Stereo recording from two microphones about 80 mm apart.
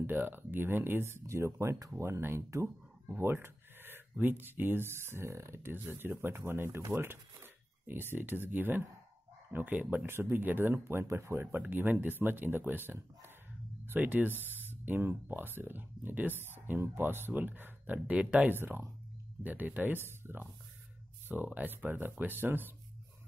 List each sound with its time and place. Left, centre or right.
0.0 s speech: right
21.5 s speech: right